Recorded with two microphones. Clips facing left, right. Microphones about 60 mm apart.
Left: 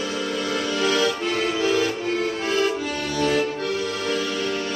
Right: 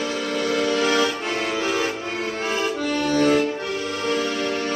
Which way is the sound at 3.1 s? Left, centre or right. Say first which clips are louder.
Right 3 dB; right.